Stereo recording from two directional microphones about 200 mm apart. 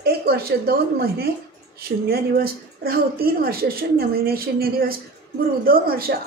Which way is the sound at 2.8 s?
50° right (ahead or behind).